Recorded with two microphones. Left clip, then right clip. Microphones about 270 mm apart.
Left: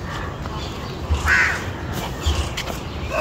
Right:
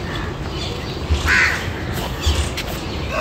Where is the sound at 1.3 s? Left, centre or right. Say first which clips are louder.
Right 1 dB; centre.